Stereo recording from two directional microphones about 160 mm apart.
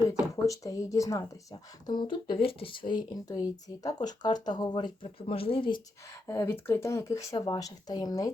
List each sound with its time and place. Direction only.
0.1 s speech: 20° left (ahead or behind)
6.2 s speech: 15° left (ahead or behind)